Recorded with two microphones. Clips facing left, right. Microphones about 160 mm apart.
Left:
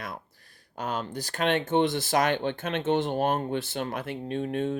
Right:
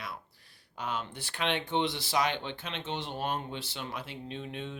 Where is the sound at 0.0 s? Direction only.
45° left (ahead or behind).